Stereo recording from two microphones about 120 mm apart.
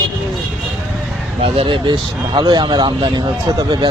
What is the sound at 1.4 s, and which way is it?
Speech, 45° right (ahead or behind).